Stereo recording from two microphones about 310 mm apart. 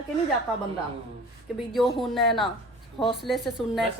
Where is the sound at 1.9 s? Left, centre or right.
Centre.